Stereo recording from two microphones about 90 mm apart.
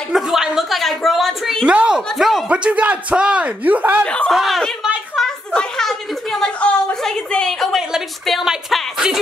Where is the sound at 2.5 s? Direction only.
15° right (ahead or behind).